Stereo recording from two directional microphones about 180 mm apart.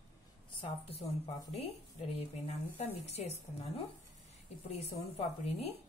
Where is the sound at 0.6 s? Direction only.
30° left (ahead or behind).